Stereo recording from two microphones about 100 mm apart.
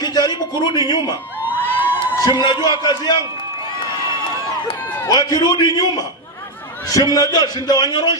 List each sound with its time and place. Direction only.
0.0 s a sound: 45° left (ahead or behind)
1.6 s crowd: 20° left (ahead or behind)
2.4 s a man's voice: 50° left (ahead or behind)
5.0 s a man's voice: 40° left (ahead or behind)